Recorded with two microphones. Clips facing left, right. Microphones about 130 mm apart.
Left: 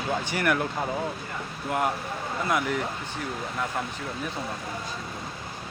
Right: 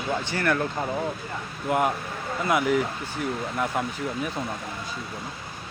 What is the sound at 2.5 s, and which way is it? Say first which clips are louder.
Speech: right 5 dB; 5° right (ahead or behind).